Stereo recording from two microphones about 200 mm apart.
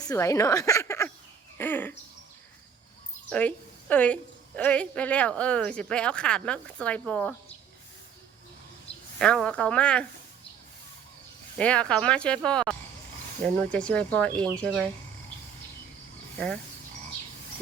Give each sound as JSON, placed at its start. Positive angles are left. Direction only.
{"t": 0.0, "sound": "a woman's voice", "side_deg": 15}
{"t": 1.5, "sound": "a sound", "side_deg": 10}
{"t": 3.2, "sound": "a woman's voice", "side_deg": 5}
{"t": 9.1, "sound": "speech", "side_deg": 5}
{"t": 11.5, "sound": "speech", "side_deg": 5}